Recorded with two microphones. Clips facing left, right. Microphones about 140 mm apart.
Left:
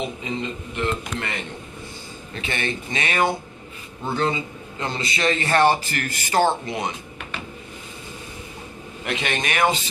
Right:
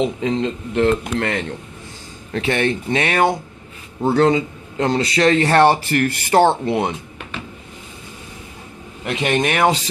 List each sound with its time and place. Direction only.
0.0 s speech: 90° right
2.3 s speech: 70° right (ahead or behind)
4.1 s a man's voice: 85° right; by 6.9 s 65° right (ahead or behind)
9.0 s speech: 40° right (ahead or behind)
9.4 s speech: 65° right (ahead or behind)